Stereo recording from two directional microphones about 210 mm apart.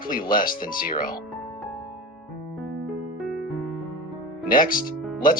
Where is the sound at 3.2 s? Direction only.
Centre (ahead or behind).